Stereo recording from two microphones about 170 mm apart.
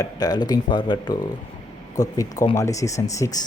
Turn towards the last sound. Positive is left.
turn(degrees=20)  # may be behind; listen again after turning